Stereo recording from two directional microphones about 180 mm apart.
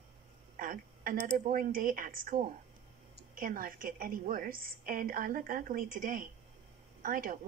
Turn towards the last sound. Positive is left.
turn(degrees=-50)  # may be behind; listen again after turning